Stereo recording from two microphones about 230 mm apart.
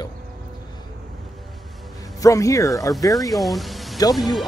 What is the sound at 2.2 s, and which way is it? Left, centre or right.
Speech, centre.